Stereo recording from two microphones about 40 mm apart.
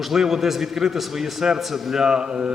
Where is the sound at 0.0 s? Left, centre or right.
Centre.